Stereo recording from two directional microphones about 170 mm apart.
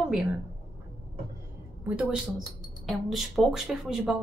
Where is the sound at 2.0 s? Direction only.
Centre (ahead or behind).